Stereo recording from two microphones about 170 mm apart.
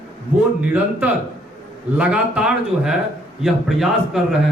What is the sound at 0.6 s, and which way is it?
A man's voice, 10° right (ahead or behind).